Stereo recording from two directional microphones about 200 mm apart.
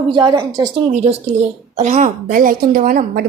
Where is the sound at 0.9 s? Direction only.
35° right (ahead or behind).